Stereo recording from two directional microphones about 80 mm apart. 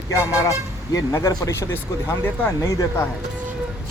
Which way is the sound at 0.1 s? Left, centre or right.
Left.